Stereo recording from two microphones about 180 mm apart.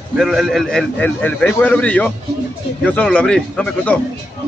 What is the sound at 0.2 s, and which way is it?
A man's voice, centre (ahead or behind).